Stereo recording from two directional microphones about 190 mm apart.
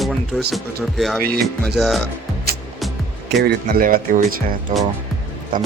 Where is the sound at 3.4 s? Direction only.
55° right (ahead or behind).